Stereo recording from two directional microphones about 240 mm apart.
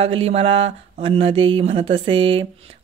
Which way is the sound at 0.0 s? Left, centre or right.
Right.